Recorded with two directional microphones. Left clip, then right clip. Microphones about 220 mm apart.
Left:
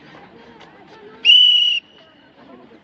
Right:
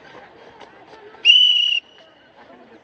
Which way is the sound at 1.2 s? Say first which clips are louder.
Left 2 dB; 20° left (ahead or behind).